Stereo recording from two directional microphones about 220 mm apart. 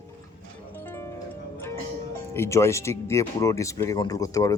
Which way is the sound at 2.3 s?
10° left (ahead or behind).